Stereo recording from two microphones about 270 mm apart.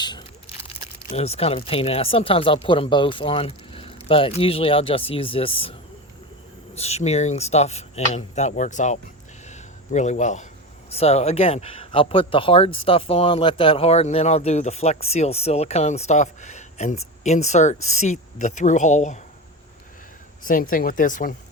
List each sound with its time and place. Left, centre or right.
0.0 s a sound: centre
1.1 s speech: left
6.7 s speech: left
9.5 s a sound: left
10.8 s speech: left
20.4 s speech: left